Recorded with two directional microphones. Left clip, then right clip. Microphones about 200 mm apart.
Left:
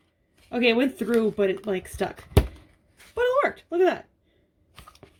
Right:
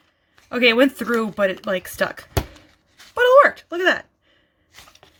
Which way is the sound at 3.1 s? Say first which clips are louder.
Right 10 dB; 55° right (ahead or behind).